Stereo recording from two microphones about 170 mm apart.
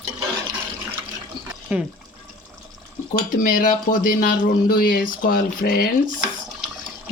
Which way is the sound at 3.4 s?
50° left (ahead or behind).